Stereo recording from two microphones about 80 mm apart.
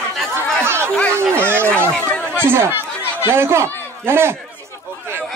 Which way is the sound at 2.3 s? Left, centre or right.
Right.